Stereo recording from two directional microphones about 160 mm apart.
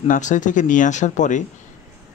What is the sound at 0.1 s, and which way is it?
Speech, 50° left (ahead or behind).